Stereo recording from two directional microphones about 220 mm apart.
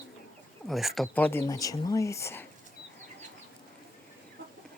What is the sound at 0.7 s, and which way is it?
Speech, centre (ahead or behind).